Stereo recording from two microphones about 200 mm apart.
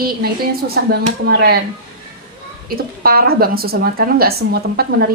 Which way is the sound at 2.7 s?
45° right (ahead or behind).